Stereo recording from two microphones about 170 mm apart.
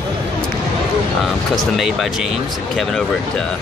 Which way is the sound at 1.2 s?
Centre (ahead or behind).